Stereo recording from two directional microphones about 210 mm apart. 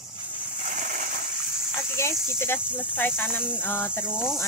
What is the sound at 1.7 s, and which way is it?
Snake, 10° left (ahead or behind).